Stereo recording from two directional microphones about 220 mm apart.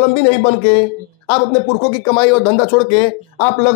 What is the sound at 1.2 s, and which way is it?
A man's voice, 25° left (ahead or behind).